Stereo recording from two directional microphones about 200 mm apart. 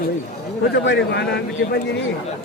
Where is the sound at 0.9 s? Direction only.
55° left (ahead or behind).